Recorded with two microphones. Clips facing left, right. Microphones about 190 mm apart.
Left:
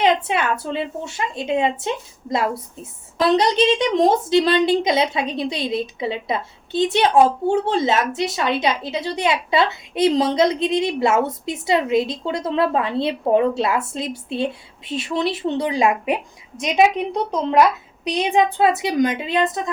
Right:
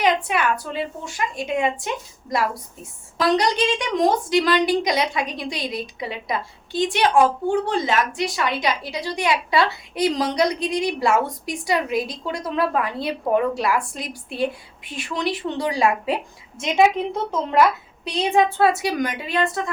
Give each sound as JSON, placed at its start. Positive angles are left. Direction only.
{"t": 0.0, "sound": "a woman's voice", "side_deg": 25}
{"t": 3.2, "sound": "a woman's voice", "side_deg": 25}